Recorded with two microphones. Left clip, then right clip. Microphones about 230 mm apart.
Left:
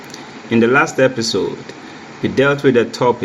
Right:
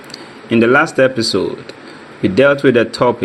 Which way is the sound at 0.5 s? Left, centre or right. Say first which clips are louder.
Right 2 dB; right.